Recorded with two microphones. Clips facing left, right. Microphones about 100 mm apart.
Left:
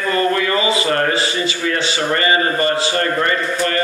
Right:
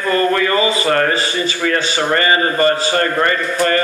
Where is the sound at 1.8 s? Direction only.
40° right (ahead or behind).